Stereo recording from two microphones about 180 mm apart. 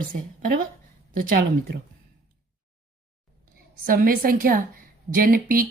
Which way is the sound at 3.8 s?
55° right (ahead or behind).